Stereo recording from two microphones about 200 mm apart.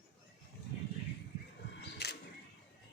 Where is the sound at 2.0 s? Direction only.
55° left (ahead or behind).